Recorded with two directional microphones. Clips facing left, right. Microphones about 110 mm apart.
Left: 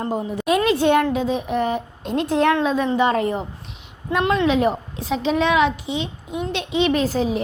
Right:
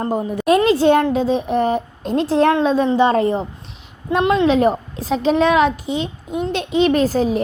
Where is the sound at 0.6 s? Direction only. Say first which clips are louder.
Right 1 dB; 30° right (ahead or behind).